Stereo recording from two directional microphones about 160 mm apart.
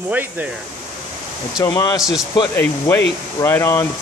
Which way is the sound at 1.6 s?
25° left (ahead or behind).